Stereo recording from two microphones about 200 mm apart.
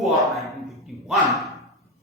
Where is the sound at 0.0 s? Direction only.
Centre (ahead or behind).